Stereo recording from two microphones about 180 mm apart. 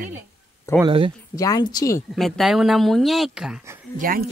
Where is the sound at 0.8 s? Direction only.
30° right (ahead or behind).